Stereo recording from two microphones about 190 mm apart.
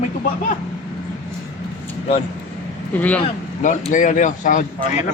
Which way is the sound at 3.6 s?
40° left (ahead or behind).